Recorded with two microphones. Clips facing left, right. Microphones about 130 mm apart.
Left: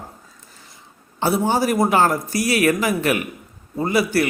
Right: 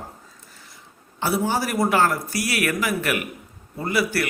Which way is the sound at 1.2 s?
25° left (ahead or behind).